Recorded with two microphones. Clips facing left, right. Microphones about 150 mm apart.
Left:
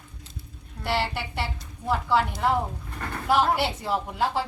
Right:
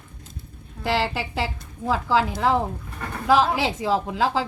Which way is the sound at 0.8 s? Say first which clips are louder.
Right 3 dB; 90° right.